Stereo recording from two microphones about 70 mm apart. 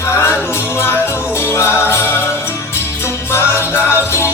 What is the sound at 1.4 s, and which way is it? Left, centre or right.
Music, left.